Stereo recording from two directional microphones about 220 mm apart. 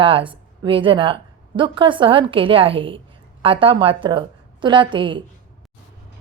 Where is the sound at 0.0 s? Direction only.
25° right (ahead or behind).